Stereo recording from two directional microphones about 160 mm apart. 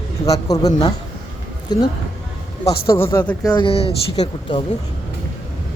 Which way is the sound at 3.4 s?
25° left (ahead or behind).